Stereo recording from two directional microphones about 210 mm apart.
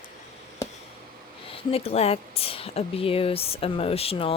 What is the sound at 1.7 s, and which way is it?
Speech, 30° left (ahead or behind).